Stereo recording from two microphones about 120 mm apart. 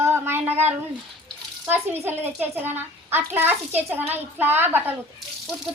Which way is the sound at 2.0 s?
15° right (ahead or behind).